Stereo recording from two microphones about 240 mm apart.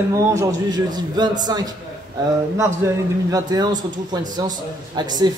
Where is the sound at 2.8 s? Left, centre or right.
Centre.